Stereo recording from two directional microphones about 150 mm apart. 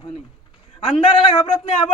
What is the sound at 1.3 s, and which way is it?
Speech, 35° left (ahead or behind).